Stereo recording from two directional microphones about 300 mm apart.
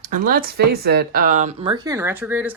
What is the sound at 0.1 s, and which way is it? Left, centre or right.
Speech, right.